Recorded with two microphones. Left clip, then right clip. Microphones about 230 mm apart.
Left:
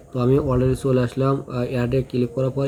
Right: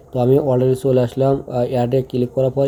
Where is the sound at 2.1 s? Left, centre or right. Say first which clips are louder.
Right 4 dB; right.